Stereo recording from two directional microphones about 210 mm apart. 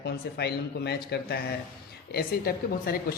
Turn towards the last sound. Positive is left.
turn(degrees=45)  # may be behind; listen again after turning